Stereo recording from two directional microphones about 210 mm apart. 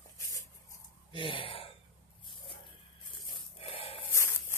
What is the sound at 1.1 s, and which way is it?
Gasp, 25° left (ahead or behind).